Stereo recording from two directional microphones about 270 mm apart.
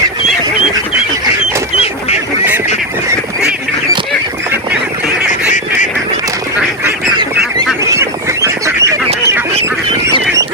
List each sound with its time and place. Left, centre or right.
1.7 s duck: left
7.9 s goose: centre